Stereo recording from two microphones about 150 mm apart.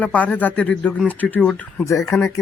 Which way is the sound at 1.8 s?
20° left (ahead or behind).